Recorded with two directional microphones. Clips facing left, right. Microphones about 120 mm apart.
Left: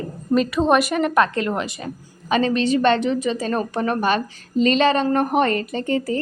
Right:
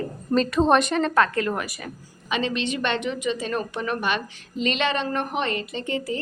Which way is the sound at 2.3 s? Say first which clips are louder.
Left 7 dB; 40° left (ahead or behind).